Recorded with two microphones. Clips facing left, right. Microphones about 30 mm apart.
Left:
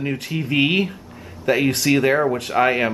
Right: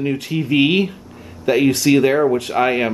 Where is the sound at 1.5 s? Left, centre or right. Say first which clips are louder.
Right 3 dB; centre.